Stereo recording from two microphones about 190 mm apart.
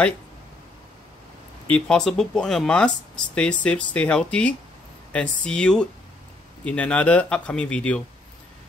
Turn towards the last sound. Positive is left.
turn(degrees=5)  # may be behind; listen again after turning